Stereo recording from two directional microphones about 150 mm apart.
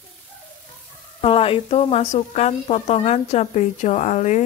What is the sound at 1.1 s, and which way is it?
A woman's voice, 40° left (ahead or behind).